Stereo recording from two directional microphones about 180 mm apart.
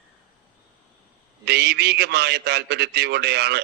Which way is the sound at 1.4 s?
65° right (ahead or behind).